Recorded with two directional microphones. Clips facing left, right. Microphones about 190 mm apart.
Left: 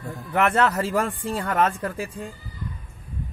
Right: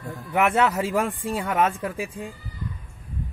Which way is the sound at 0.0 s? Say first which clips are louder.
Even; 5° right (ahead or behind).